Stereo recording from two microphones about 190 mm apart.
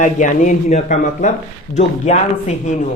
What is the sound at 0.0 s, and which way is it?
Speech, 40° left (ahead or behind).